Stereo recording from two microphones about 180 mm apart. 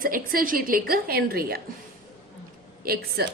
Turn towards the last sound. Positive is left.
turn(degrees=-55)  # may be behind; listen again after turning